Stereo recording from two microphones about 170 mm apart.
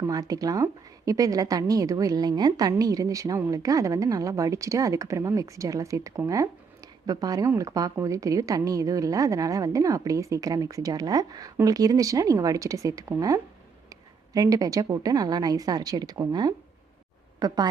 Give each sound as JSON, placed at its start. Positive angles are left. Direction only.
{"t": 0.1, "sound": "a woman's voice", "side_deg": -20}